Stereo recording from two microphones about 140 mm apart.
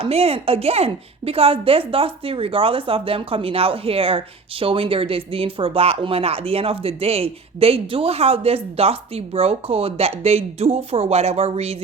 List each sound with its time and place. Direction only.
0.0 s speech: 45° right (ahead or behind)